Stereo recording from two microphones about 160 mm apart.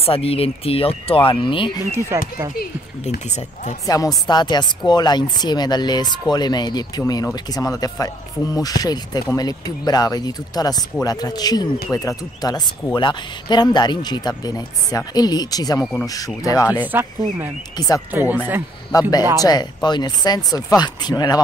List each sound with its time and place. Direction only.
0.0 s speech: 35° left (ahead or behind)
1.9 s speech: 15° right (ahead or behind)
3.0 s speech: 45° left (ahead or behind)
3.8 s speech: 20° left (ahead or behind)
15.8 s speech: 5° left (ahead or behind)
16.8 s speech: 10° right (ahead or behind)
17.7 s speech: 20° left (ahead or behind)
18.1 s speech: 10° right (ahead or behind)
18.9 s speech: 25° left (ahead or behind)